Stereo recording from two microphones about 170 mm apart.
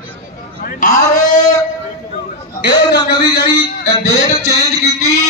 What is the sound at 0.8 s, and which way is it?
Speech, 50° left (ahead or behind).